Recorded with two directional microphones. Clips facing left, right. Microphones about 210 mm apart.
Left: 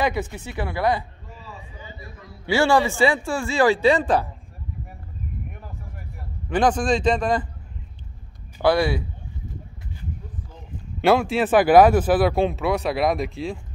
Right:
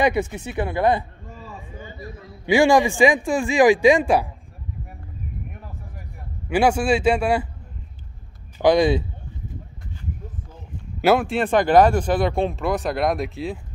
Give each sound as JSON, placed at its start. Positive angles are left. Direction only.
{"t": 0.0, "sound": "speech", "side_deg": -20}
{"t": 1.4, "sound": "a sound", "side_deg": -50}
{"t": 2.4, "sound": "speech", "side_deg": -15}
{"t": 5.5, "sound": "a sound", "side_deg": 0}
{"t": 6.5, "sound": "speech", "side_deg": -10}
{"t": 8.6, "sound": "speech", "side_deg": -20}
{"t": 11.0, "sound": "speech", "side_deg": 0}